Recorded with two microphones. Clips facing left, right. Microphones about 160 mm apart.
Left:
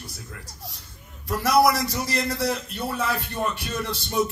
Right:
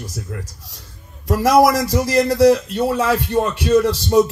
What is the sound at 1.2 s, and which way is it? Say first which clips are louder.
Speech: right 6 dB; 90° right.